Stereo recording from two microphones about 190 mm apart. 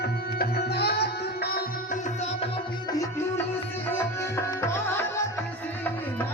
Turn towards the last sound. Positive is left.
turn(degrees=15)  # may be behind; listen again after turning